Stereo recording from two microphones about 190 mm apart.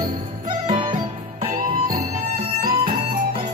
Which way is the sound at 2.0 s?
40° right (ahead or behind).